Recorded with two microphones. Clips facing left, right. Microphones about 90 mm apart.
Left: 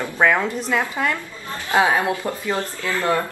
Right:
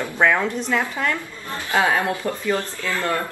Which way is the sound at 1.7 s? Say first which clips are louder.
Left 2 dB; 20° left (ahead or behind).